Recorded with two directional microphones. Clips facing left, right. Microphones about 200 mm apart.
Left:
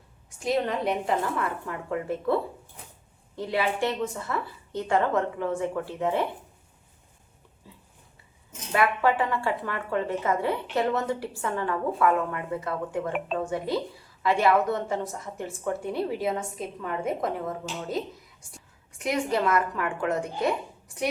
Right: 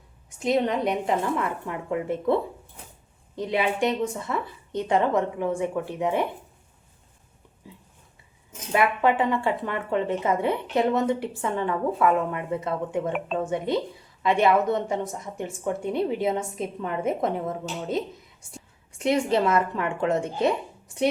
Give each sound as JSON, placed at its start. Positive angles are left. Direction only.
{"t": 0.4, "sound": "a woman's voice", "side_deg": -20}
{"t": 7.6, "sound": "a sound", "side_deg": -15}
{"t": 8.7, "sound": "speech", "side_deg": -20}